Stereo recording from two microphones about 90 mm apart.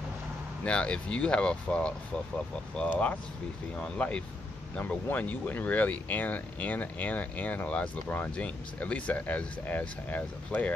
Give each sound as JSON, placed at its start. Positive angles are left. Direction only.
{"t": 0.7, "sound": "speech", "side_deg": 10}